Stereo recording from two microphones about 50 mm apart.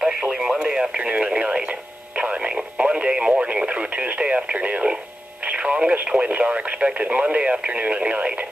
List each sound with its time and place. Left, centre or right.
0.3 s radio: centre
6.0 s speech: right